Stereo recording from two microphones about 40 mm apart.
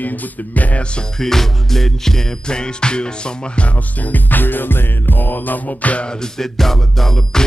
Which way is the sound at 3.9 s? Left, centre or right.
Left.